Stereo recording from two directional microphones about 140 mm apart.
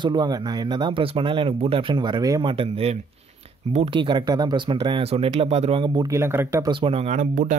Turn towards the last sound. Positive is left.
turn(degrees=-70)  # may be behind; listen again after turning